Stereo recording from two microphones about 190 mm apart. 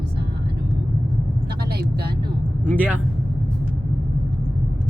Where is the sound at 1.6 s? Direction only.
55° right (ahead or behind).